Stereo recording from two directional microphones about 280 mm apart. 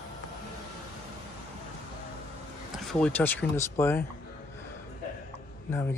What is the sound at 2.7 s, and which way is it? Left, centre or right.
Speech, centre.